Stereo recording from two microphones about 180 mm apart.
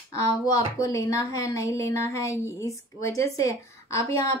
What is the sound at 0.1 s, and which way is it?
Speech, 20° left (ahead or behind).